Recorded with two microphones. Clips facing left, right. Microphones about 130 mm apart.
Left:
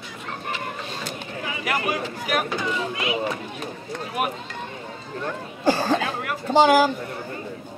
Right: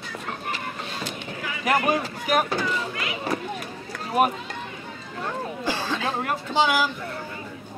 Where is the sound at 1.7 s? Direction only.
35° right (ahead or behind).